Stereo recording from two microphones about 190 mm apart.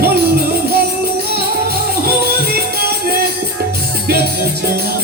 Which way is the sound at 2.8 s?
55° right (ahead or behind).